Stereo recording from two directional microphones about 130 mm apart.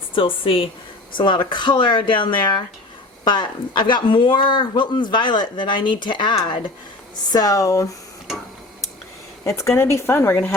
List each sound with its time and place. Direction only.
0.1 s a woman's voice: 45° left (ahead or behind); by 7.9 s 25° left (ahead or behind)
9.4 s a woman's voice: 25° left (ahead or behind)